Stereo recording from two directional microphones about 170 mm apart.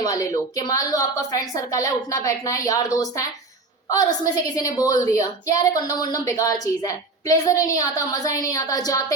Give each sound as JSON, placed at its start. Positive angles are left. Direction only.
{"t": 0.0, "sound": "a woman's voice", "side_deg": 20}
{"t": 4.4, "sound": "a woman's voice", "side_deg": 20}